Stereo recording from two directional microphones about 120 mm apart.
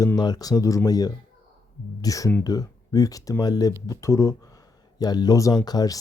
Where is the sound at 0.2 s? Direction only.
35° left (ahead or behind).